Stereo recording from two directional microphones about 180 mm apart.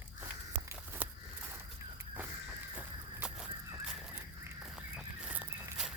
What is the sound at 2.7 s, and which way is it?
Crow, 5° right (ahead or behind).